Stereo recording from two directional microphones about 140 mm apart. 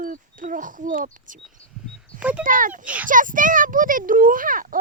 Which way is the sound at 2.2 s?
10° right (ahead or behind).